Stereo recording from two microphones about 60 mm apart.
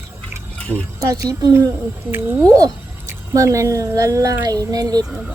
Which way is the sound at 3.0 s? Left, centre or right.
Right.